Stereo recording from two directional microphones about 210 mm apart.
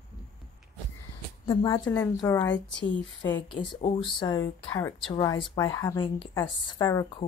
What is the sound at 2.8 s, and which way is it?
Speech, 60° left (ahead or behind).